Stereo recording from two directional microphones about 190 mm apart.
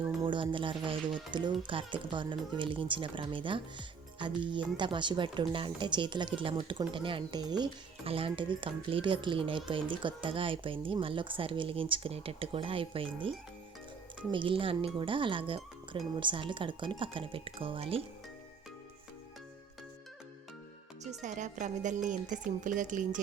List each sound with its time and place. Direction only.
0.0 s speech: 25° right (ahead or behind)
21.0 s speech: 40° right (ahead or behind)